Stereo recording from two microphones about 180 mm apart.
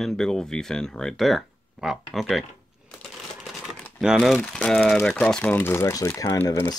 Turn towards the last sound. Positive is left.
turn(degrees=15)  # may be behind; listen again after turning